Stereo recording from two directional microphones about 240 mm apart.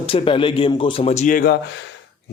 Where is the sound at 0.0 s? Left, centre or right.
Left.